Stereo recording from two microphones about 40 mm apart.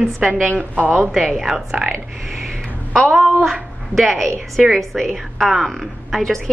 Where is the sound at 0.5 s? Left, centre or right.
Right.